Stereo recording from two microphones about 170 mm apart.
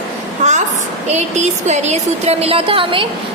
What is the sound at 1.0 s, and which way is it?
Speech, 40° right (ahead or behind).